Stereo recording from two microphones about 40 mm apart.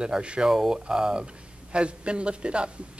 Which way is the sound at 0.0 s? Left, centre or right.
Right.